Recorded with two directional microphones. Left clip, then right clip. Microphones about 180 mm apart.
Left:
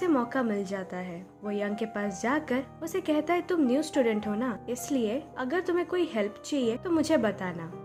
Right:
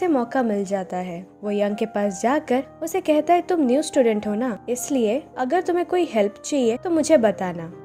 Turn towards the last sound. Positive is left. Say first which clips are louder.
# right 9 dB
turn(degrees=-30)  # may be behind; listen again after turning